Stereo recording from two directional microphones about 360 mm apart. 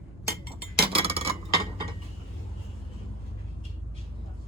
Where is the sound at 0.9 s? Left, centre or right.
Centre.